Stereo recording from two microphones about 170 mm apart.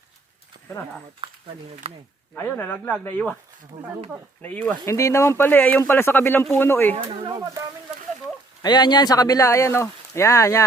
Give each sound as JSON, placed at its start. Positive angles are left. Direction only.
{"t": 1.8, "sound": "speech", "side_deg": -35}
{"t": 2.3, "sound": "speech", "side_deg": 10}
{"t": 4.4, "sound": "speech", "side_deg": 10}
{"t": 7.3, "sound": "speech", "side_deg": -25}
{"t": 8.6, "sound": "speech", "side_deg": 25}